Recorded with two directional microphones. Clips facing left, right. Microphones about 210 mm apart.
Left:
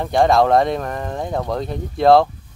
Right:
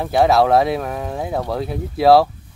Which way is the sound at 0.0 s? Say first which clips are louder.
Even; 5° right (ahead or behind).